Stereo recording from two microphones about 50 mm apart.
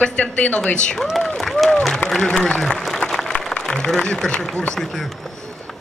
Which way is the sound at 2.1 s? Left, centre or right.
Centre.